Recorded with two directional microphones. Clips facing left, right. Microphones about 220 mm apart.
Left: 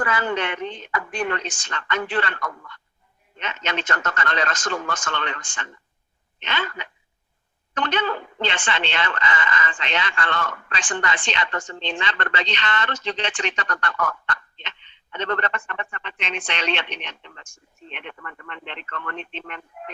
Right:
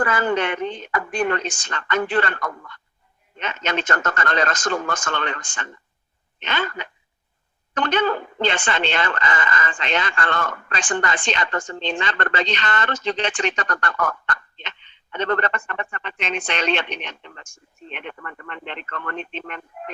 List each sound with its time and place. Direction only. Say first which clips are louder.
0.0 s speech: right 3 dB; 45° right (ahead or behind)